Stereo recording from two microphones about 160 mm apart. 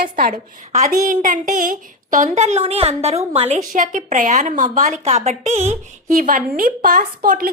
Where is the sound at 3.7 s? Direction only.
55° right (ahead or behind).